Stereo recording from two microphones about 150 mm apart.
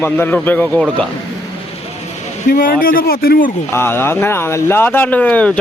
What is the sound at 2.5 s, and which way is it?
Speech, 75° left (ahead or behind).